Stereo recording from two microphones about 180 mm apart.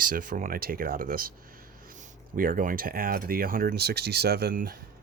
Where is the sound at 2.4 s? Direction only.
50° right (ahead or behind).